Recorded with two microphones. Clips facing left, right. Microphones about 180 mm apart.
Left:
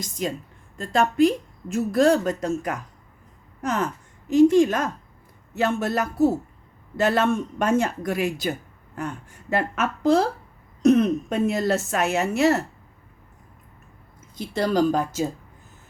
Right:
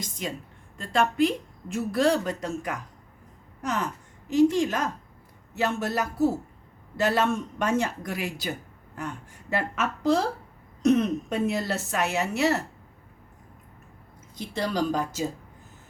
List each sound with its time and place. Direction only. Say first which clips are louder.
0.0 s a woman's voice: left 5 dB; 40° left (ahead or behind)
3.6 s a sound: left 4 dB; 45° left (ahead or behind)
4.3 s a woman's voice: left 5 dB; 50° left (ahead or behind)
14.5 s a woman's voice: left 6 dB; 50° left (ahead or behind)